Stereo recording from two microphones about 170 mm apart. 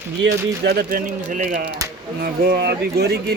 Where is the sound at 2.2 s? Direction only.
70° right (ahead or behind).